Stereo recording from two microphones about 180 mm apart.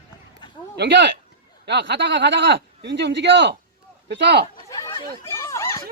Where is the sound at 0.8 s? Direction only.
75° right (ahead or behind).